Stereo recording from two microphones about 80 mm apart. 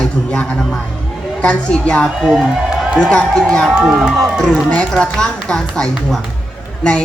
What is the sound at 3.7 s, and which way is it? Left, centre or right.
Speech, centre.